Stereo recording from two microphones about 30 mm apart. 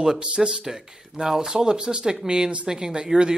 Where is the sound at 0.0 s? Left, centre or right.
Right.